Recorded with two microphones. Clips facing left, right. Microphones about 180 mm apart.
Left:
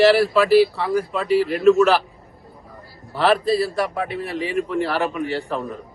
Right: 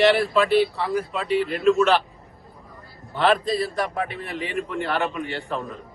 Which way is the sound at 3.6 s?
Centre (ahead or behind).